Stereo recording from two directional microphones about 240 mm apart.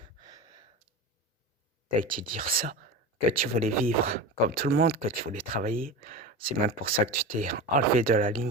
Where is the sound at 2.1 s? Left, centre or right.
Right.